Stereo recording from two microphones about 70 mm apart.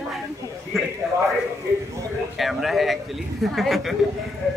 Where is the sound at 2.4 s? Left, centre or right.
Centre.